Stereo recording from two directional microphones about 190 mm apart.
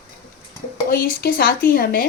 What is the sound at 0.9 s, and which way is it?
A woman's voice, 50° left (ahead or behind).